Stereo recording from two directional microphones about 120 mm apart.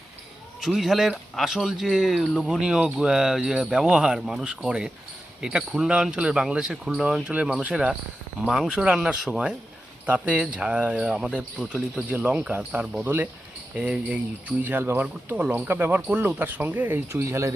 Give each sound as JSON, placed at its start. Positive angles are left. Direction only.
{"t": 0.6, "sound": "speech", "side_deg": 0}